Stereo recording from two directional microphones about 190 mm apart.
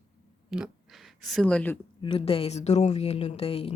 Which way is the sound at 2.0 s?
30° left (ahead or behind).